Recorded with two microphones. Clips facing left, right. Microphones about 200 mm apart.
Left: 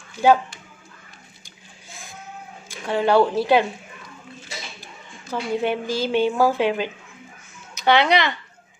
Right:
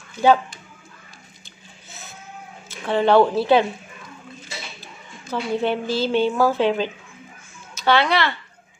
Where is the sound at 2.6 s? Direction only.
10° left (ahead or behind).